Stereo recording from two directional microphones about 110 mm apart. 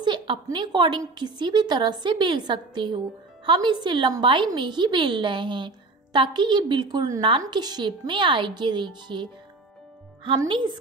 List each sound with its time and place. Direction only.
0.0 s a woman's voice: 45° right (ahead or behind)
10.5 s a woman's voice: 45° right (ahead or behind)